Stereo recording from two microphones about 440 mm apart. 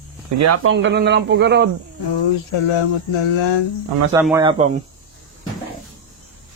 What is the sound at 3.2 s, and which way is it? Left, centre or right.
Speech, left.